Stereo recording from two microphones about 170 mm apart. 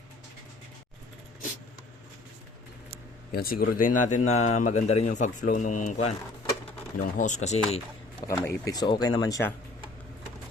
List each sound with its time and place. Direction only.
3.3 s a man's voice: 60° left (ahead or behind); by 7.6 s 45° left (ahead or behind)
8.3 s speech: 20° left (ahead or behind)